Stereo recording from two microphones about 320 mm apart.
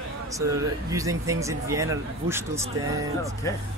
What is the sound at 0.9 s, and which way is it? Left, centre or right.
Speech, centre.